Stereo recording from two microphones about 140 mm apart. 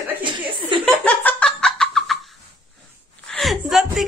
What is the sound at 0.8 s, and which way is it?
Laughter, 10° left (ahead or behind).